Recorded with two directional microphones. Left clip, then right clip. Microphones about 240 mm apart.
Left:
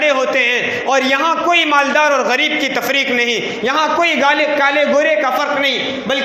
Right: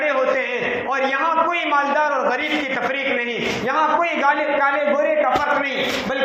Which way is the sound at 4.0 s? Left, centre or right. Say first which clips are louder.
Left 5 dB; left.